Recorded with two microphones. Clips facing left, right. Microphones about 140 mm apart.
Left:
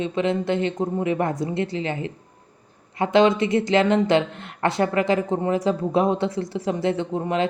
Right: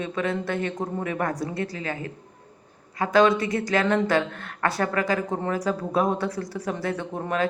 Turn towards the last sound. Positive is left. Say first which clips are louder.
# left 3 dB
turn(degrees=20)  # may be behind; listen again after turning